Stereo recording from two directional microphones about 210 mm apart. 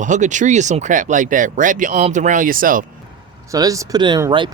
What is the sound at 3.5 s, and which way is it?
Speech, 15° right (ahead or behind).